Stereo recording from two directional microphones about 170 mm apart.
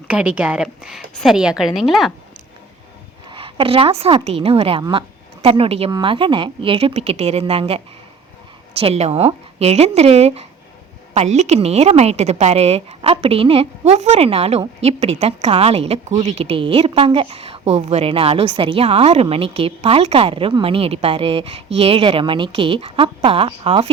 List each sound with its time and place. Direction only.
0.1 s a woman's voice: 10° right (ahead or behind)
3.2 s a woman's voice: 30° right (ahead or behind)
8.8 s a woman's voice: 35° right (ahead or behind)